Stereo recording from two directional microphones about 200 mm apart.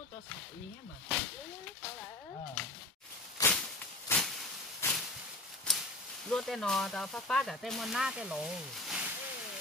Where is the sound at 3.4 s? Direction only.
20° left (ahead or behind).